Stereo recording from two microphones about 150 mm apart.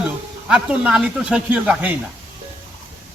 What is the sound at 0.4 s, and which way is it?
Speech, 5° right (ahead or behind).